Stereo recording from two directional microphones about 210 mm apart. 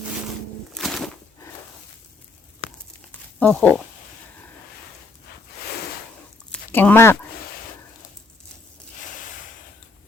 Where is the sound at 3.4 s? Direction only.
5° left (ahead or behind).